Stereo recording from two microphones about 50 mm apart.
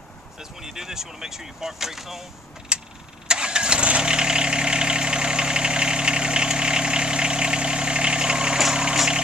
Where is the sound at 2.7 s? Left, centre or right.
Centre.